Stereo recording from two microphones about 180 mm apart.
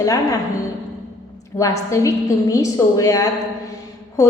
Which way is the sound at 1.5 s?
15° left (ahead or behind).